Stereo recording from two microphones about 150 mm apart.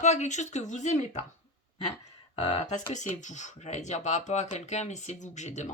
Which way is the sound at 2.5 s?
50° left (ahead or behind).